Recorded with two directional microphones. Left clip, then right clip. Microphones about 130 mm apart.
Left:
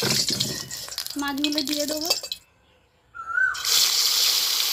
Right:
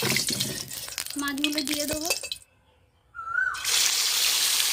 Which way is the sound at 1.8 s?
35° left (ahead or behind).